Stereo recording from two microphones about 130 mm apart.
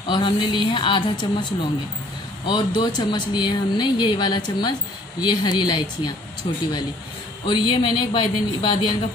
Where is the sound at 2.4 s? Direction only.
35° left (ahead or behind).